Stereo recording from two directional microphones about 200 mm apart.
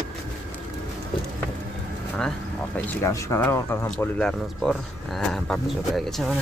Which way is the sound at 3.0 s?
15° left (ahead or behind).